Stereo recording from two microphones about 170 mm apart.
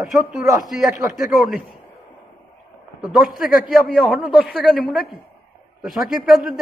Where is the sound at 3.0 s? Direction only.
5° right (ahead or behind).